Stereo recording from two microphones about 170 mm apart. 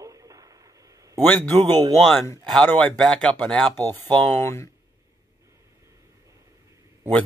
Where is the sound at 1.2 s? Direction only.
10° left (ahead or behind).